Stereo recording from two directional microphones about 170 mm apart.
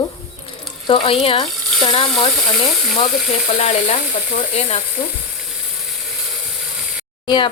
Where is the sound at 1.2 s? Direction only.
30° left (ahead or behind).